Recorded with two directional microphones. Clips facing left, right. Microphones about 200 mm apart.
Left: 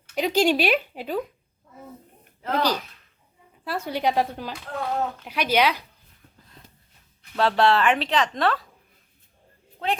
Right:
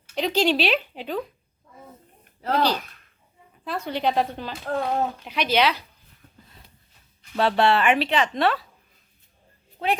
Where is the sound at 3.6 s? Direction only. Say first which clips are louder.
Even; 10° left (ahead or behind).